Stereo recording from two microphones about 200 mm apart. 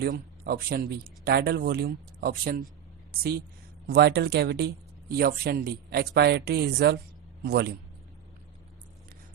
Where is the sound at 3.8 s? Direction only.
55° right (ahead or behind).